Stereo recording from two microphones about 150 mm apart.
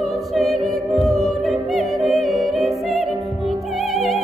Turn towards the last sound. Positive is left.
turn(degrees=0)  # may be behind; listen again after turning